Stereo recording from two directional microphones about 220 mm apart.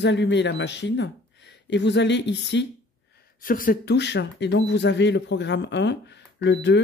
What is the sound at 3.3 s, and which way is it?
Speech, 40° left (ahead or behind).